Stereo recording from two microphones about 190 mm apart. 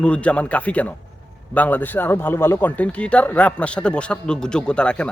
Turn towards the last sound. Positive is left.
turn(degrees=5)  # may be behind; listen again after turning